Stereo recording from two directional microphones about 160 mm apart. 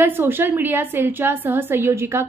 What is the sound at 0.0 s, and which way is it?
A woman's voice, 15° right (ahead or behind).